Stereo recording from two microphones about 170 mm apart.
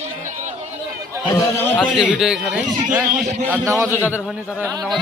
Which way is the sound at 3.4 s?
15° right (ahead or behind).